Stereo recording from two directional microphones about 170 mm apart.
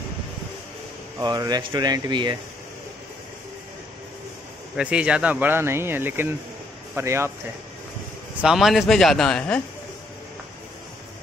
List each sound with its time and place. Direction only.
1.2 s speech: 25° right (ahead or behind)
4.7 s speech: 5° right (ahead or behind)
8.4 s a man's voice: centre (ahead or behind)